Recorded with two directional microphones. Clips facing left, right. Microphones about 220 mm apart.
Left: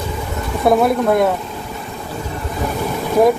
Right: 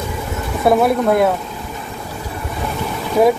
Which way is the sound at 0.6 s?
Centre (ahead or behind).